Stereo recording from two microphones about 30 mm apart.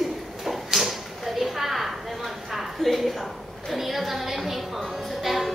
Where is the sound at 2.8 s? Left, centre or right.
Centre.